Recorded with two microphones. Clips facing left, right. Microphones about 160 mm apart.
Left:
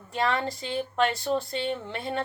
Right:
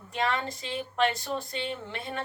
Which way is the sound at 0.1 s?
35° left (ahead or behind).